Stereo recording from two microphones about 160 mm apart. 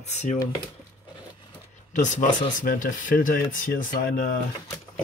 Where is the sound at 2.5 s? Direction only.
60° left (ahead or behind).